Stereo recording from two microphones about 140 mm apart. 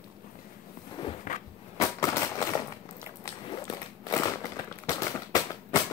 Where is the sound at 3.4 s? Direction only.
30° left (ahead or behind).